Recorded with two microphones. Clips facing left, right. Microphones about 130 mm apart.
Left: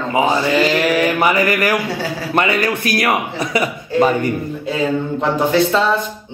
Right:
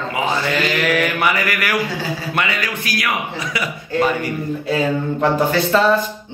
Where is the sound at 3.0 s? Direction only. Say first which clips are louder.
Left 5 dB; 40° left (ahead or behind).